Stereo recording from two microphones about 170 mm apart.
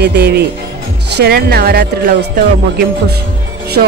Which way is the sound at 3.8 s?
55° right (ahead or behind).